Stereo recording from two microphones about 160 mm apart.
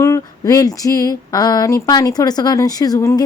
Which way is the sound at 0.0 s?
20° left (ahead or behind).